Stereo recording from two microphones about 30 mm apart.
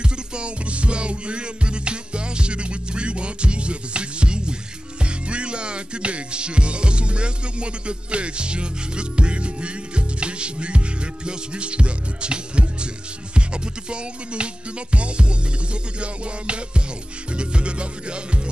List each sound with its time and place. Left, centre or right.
0.0 s music: right